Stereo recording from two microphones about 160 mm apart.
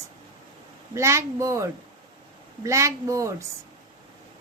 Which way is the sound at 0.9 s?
20° right (ahead or behind).